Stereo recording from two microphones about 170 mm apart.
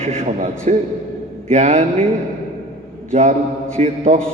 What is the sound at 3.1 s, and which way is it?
Speech, 40° right (ahead or behind).